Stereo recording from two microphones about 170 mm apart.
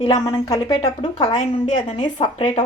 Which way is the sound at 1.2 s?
40° left (ahead or behind).